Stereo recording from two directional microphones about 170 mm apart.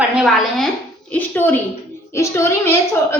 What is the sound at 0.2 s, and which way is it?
Speech, centre (ahead or behind).